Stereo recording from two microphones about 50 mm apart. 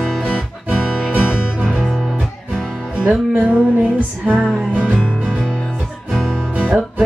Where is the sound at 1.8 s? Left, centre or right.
Centre.